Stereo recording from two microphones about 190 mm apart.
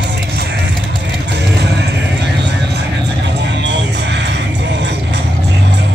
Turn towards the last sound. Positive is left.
turn(degrees=-65)  # may be behind; listen again after turning